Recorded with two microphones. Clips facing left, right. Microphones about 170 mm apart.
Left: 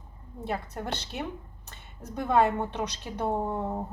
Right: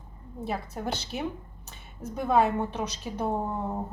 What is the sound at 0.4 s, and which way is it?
A woman's voice, centre (ahead or behind).